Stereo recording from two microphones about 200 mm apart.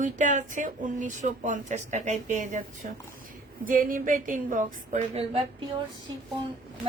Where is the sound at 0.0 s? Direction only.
40° right (ahead or behind).